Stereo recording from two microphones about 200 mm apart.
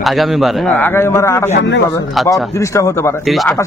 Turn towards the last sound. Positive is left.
turn(degrees=0)  # may be behind; listen again after turning